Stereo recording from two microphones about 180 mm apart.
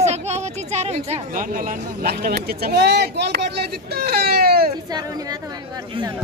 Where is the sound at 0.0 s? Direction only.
40° right (ahead or behind); by 4.6 s 55° right (ahead or behind).